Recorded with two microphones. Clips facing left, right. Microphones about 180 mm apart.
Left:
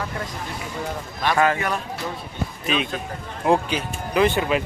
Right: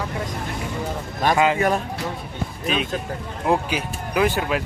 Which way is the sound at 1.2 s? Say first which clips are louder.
Right 3 dB; 45° right (ahead or behind).